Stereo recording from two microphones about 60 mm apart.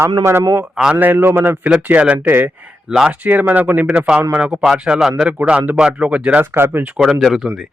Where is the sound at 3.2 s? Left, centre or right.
Right.